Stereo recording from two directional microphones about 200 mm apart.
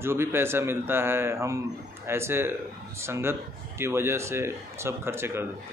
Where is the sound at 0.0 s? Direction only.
10° right (ahead or behind).